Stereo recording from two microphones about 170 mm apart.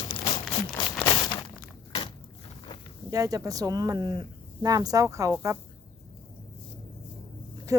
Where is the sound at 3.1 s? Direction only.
20° right (ahead or behind).